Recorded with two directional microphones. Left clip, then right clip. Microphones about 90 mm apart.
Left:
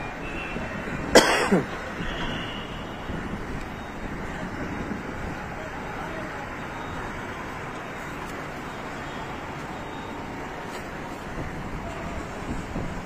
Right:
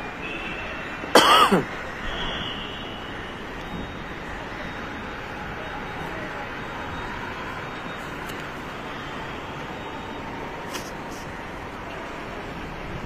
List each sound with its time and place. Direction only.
1.1 s throat clearing: centre (ahead or behind)